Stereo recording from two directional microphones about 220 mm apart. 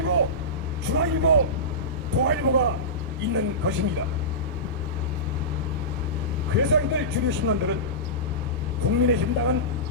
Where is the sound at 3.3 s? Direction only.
55° right (ahead or behind).